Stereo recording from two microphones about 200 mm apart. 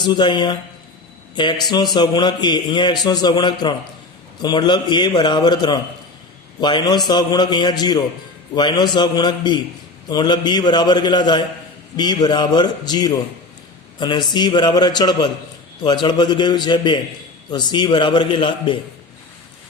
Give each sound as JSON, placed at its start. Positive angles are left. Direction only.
{"t": 0.0, "sound": "a man's voice", "side_deg": 20}